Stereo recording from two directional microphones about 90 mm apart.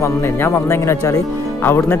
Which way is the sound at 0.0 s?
30° left (ahead or behind).